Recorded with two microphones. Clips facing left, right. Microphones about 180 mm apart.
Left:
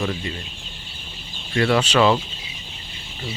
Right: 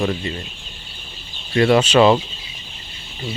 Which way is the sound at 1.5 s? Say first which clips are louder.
Right 4 dB; 20° right (ahead or behind).